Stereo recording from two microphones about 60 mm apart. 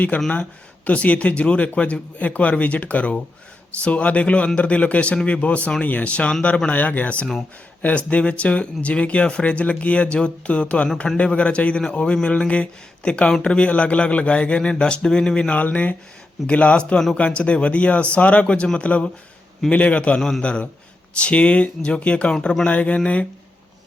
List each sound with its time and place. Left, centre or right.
0.1 s a man's voice: left
15.6 s speech: left
20.1 s a man's voice: centre
22.7 s speech: left